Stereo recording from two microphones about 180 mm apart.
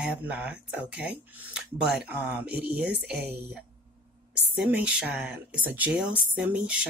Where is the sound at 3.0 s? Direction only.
65° right (ahead or behind).